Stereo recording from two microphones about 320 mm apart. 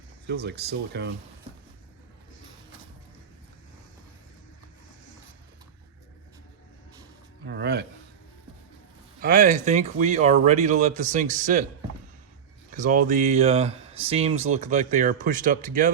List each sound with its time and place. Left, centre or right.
0.3 s speech: right
7.4 s speech: right
9.2 s speech: right
12.7 s speech: right